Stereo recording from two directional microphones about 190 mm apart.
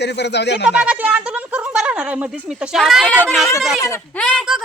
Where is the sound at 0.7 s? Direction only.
5° right (ahead or behind).